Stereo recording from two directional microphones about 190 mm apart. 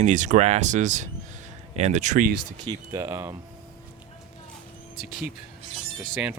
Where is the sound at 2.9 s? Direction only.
15° right (ahead or behind).